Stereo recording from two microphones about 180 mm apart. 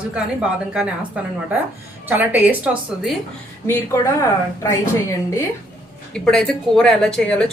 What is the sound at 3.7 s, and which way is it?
Speech, 15° left (ahead or behind).